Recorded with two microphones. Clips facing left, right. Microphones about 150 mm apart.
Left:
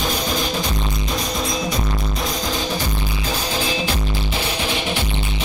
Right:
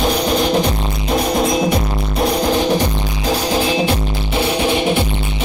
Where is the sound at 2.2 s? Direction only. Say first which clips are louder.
Right 12 dB; 65° right (ahead or behind).